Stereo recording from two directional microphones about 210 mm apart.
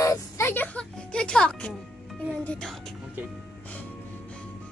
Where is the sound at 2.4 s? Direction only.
5° left (ahead or behind).